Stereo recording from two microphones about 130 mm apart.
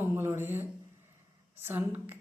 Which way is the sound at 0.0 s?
20° right (ahead or behind).